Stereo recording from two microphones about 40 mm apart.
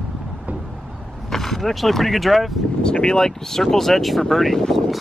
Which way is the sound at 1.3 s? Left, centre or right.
Centre.